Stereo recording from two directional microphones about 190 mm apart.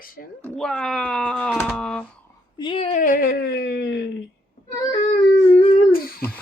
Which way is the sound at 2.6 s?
30° left (ahead or behind).